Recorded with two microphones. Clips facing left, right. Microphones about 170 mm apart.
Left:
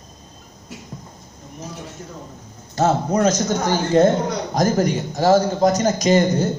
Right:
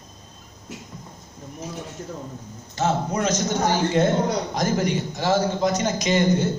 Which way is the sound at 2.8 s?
40° left (ahead or behind).